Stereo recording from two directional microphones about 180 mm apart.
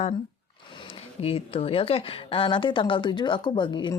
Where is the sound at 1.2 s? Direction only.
35° left (ahead or behind).